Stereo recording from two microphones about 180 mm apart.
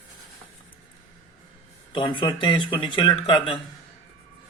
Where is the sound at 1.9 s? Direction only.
25° left (ahead or behind).